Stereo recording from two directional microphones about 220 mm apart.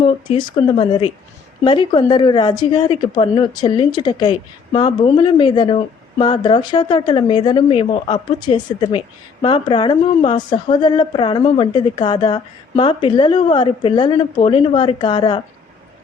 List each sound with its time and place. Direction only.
0.3 s a woman's voice: 20° left (ahead or behind)